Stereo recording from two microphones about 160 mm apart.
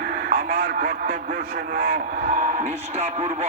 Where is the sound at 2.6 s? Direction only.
45° right (ahead or behind).